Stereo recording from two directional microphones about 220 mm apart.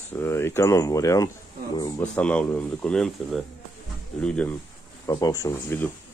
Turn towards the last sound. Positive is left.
turn(degrees=10)  # may be behind; listen again after turning